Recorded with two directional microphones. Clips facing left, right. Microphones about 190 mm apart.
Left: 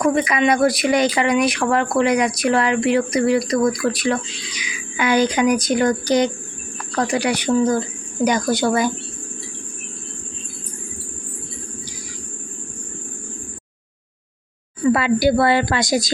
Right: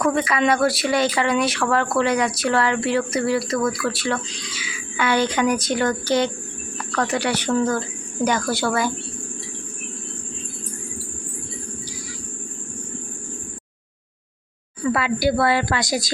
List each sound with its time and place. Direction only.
0.0 s speech: 15° left (ahead or behind)
14.9 s a woman's voice: 25° left (ahead or behind)